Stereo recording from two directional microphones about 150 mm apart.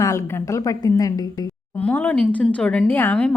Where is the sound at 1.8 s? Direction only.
10° left (ahead or behind).